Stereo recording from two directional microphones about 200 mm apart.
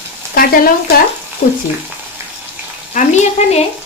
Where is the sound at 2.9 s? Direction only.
35° left (ahead or behind).